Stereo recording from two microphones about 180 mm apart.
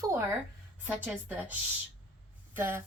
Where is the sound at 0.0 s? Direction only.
15° right (ahead or behind).